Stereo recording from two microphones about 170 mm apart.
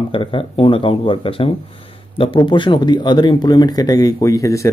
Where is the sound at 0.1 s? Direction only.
30° left (ahead or behind).